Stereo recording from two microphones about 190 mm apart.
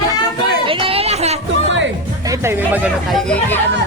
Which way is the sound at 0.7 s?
30° right (ahead or behind).